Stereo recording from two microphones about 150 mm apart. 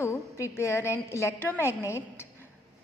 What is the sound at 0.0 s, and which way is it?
A woman's voice, 15° left (ahead or behind).